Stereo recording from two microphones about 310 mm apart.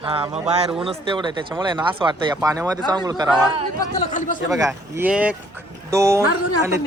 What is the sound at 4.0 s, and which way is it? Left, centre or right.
Speech, left.